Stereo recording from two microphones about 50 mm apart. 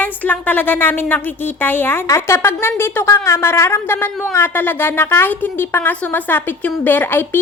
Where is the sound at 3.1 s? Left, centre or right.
Left.